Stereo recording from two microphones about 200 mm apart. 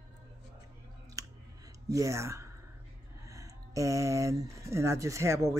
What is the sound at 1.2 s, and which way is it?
Clicking, 15° right (ahead or behind).